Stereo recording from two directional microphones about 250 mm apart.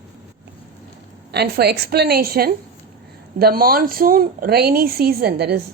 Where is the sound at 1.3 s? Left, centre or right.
Right.